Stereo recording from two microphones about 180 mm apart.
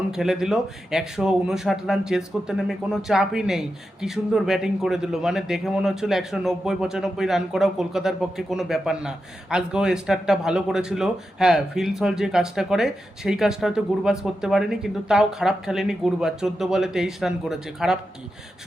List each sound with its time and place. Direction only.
0.1 s speech: 5° right (ahead or behind)